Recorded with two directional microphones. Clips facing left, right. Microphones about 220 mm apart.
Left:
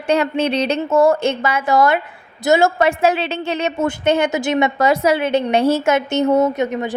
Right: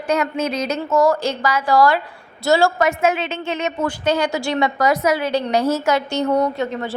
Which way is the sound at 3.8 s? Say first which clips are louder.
Left 3 dB; 25° left (ahead or behind).